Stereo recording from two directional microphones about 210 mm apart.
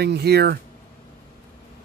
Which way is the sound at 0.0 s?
50° right (ahead or behind).